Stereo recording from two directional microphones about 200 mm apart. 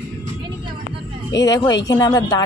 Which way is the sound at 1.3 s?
20° left (ahead or behind).